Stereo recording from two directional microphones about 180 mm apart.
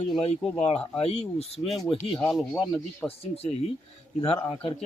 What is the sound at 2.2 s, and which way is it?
Speech, 5° left (ahead or behind).